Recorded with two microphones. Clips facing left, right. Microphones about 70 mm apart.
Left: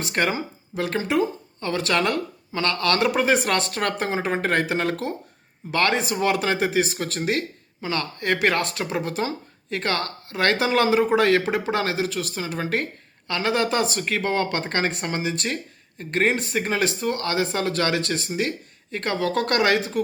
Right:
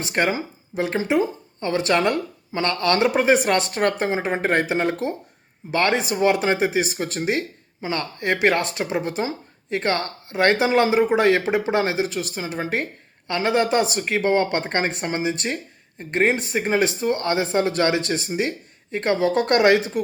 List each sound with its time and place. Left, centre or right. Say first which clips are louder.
0.0 s speech: right 2 dB; right